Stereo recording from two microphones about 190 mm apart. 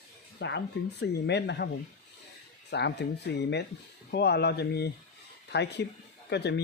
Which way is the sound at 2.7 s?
60° left (ahead or behind).